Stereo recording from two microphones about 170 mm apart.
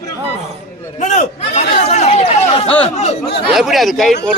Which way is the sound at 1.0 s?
45° left (ahead or behind).